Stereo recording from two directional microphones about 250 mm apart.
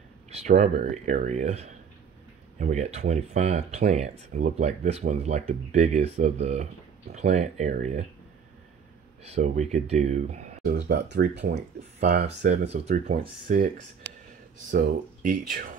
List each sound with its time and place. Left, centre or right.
0.3 s speech: right
9.2 s speech: right